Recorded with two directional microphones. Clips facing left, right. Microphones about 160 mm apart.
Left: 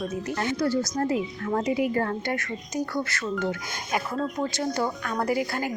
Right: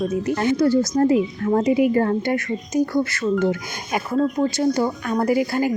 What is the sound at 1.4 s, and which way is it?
Speech, 30° right (ahead or behind).